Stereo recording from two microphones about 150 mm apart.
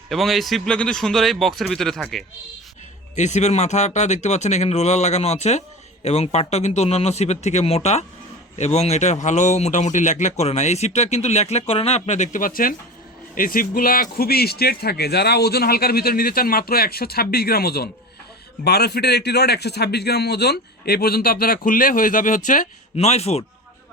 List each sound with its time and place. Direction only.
0.1 s a man's voice: centre (ahead or behind)
3.2 s speech: 50° left (ahead or behind)